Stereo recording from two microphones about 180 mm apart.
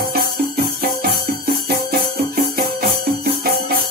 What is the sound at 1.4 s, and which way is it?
Music, 55° right (ahead or behind).